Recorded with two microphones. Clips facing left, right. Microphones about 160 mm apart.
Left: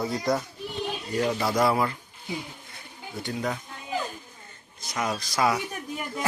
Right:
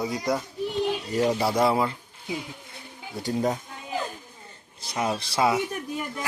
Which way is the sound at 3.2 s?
40° right (ahead or behind).